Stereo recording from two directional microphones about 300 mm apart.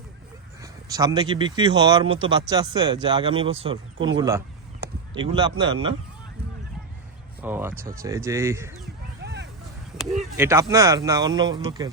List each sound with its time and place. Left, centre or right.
0.6 s speech: centre
3.9 s speech: right
4.2 s speech: centre
7.4 s speech: centre
9.2 s a sound: right
10.2 s speech: centre